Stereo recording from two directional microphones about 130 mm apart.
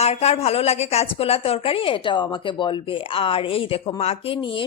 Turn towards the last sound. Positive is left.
turn(degrees=40)  # may be behind; listen again after turning